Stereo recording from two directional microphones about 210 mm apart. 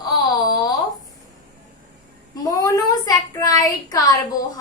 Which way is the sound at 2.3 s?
15° left (ahead or behind).